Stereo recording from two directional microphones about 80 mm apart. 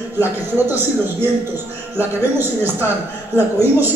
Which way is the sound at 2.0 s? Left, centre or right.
Right.